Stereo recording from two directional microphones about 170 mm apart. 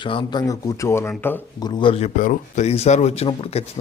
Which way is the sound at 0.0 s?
30° left (ahead or behind).